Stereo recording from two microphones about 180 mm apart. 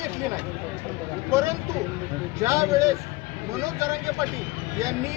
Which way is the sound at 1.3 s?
15° right (ahead or behind).